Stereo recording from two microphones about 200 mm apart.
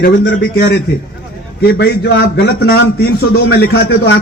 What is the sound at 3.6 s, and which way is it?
Speech, 50° left (ahead or behind).